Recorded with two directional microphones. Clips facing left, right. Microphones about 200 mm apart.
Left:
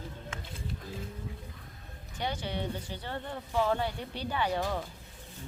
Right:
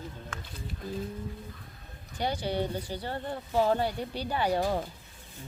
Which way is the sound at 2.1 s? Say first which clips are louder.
Right 5 dB; 35° right (ahead or behind).